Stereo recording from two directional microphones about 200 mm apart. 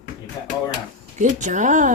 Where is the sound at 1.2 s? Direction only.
40° right (ahead or behind).